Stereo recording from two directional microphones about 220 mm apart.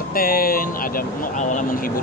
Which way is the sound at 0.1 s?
40° left (ahead or behind).